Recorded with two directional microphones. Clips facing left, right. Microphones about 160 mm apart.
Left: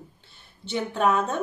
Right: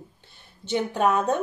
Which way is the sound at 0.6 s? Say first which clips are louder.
Right 1 dB; 15° right (ahead or behind).